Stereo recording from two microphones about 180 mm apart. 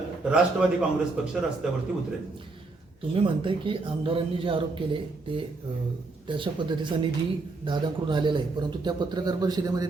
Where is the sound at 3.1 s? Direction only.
30° right (ahead or behind).